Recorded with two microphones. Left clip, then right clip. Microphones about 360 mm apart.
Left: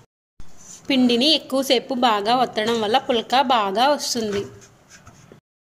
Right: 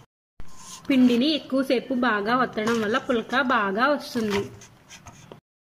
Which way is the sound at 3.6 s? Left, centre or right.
Left.